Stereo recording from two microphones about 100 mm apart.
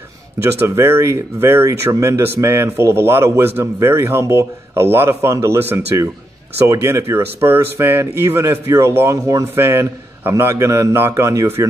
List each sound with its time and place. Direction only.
0.6 s speech: 25° right (ahead or behind)